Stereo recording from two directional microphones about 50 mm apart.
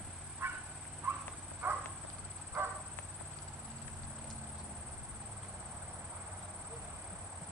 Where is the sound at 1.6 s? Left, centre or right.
Right.